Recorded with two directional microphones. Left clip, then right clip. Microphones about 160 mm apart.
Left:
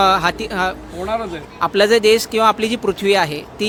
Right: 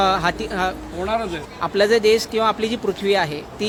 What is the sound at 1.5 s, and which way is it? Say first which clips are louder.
Speech: left 4 dB; 30° left (ahead or behind).